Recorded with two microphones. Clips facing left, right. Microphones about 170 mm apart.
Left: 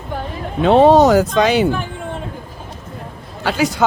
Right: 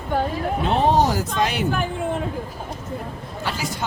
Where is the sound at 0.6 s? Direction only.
90° left.